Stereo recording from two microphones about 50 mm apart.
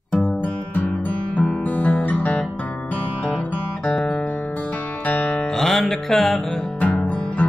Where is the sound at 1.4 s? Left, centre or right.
Centre.